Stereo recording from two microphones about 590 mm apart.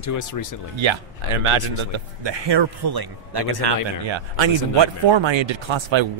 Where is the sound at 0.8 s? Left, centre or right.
Right.